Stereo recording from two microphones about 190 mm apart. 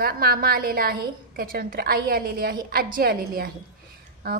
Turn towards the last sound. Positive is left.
turn(degrees=-55)  # may be behind; listen again after turning